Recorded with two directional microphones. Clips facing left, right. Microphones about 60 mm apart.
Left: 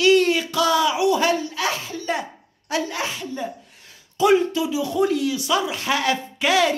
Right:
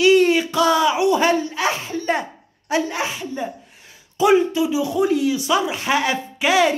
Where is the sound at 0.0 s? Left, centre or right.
Centre; by 2.2 s right.